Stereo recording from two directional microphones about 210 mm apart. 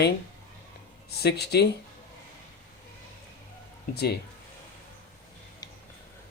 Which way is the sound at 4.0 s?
50° left (ahead or behind).